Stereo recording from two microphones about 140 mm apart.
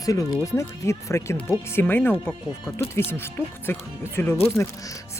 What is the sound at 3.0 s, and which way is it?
Speech, 15° left (ahead or behind).